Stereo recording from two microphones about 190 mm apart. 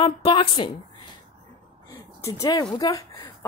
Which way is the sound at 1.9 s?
15° left (ahead or behind).